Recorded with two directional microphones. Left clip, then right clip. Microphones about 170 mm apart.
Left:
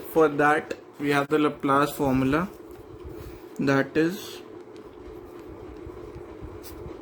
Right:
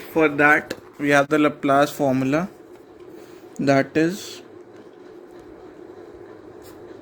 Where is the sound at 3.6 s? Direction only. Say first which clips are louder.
Right 4 dB; 25° right (ahead or behind).